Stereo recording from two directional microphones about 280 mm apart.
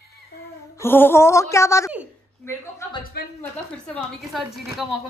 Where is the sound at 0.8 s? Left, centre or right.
Centre.